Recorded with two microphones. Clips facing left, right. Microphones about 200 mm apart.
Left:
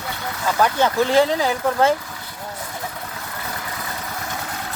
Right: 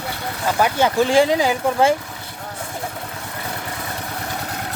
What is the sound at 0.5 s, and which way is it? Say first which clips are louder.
Speech: right 1 dB; 10° right (ahead or behind).